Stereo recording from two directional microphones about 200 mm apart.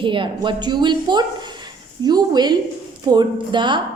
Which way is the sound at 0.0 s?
25° right (ahead or behind).